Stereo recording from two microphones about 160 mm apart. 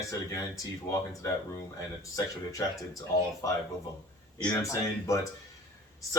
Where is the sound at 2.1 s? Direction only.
20° left (ahead or behind).